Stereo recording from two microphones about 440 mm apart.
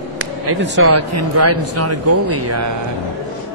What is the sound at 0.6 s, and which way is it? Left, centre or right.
Speech, right.